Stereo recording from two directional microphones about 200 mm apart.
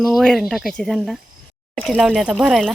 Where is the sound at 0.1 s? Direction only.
Centre (ahead or behind).